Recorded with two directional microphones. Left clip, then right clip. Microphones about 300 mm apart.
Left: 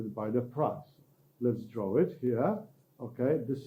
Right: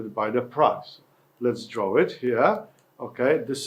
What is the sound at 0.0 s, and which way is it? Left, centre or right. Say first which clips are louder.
Speech: right 8 dB; centre.